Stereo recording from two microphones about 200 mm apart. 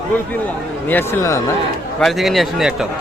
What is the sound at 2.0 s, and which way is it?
Speech, centre (ahead or behind).